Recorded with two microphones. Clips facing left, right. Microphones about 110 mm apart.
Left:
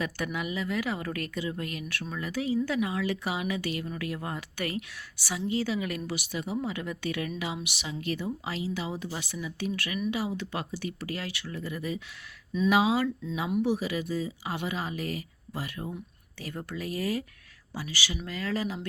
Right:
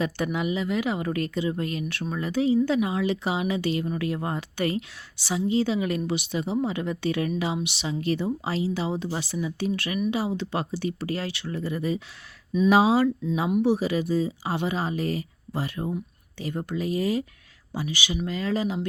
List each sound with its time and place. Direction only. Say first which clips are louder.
0.0 s speech: right 6 dB; 25° right (ahead or behind)